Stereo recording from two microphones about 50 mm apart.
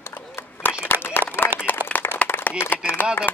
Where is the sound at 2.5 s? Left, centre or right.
Left.